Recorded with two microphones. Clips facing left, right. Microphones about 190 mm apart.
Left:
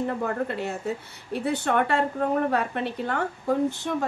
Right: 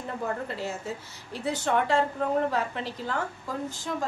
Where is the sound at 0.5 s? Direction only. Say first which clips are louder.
Left 4 dB; 60° left (ahead or behind).